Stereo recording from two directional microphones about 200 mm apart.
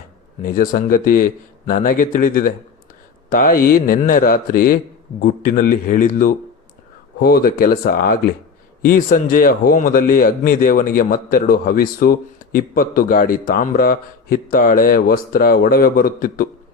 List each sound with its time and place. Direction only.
0.4 s a man's voice: 45° left (ahead or behind)